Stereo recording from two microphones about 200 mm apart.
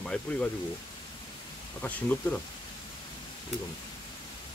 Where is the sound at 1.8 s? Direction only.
10° left (ahead or behind).